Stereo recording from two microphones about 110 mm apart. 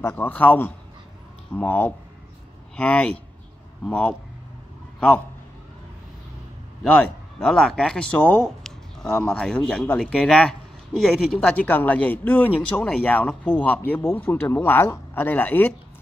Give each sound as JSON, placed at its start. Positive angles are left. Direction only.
{"t": 0.0, "sound": "speech", "side_deg": 15}
{"t": 7.3, "sound": "speech", "side_deg": 5}
{"t": 8.5, "sound": "a sound", "side_deg": 5}
{"t": 9.3, "sound": "speech", "side_deg": 10}
{"t": 11.3, "sound": "speech", "side_deg": 10}